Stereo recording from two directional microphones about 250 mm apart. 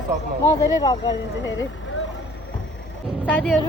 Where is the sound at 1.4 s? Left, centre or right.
Left.